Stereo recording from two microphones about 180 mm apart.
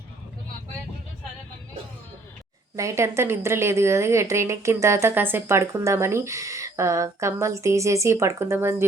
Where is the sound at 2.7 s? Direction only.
15° right (ahead or behind).